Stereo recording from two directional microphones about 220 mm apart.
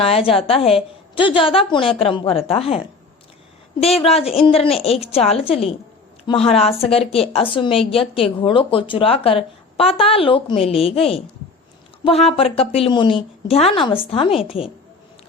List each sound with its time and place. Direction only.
0.0 s speech: 25° left (ahead or behind)